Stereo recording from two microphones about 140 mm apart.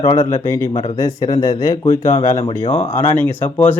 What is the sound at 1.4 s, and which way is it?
Speech, 25° left (ahead or behind).